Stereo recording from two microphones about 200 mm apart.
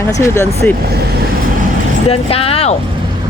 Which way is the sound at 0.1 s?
15° left (ahead or behind).